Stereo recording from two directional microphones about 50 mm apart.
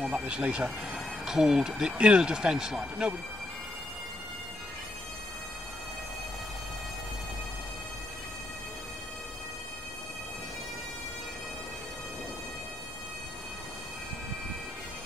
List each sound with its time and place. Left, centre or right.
0.0 s speech: right
0.9 s speech: centre